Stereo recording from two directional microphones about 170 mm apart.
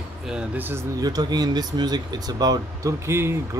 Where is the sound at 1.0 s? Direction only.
25° right (ahead or behind).